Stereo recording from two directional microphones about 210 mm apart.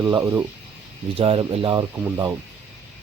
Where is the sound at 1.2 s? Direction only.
25° right (ahead or behind).